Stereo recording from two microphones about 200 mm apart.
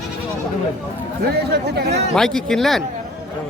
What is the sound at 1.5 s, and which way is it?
Speech, 55° right (ahead or behind).